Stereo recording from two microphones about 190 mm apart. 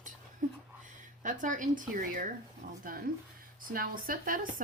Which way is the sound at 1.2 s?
40° right (ahead or behind).